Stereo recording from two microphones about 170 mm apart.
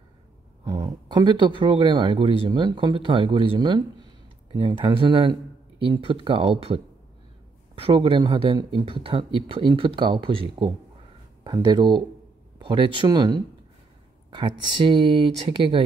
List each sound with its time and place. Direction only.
0.7 s speech: 25° right (ahead or behind)